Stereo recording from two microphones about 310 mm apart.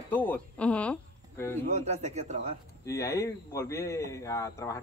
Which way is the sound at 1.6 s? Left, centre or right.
Right.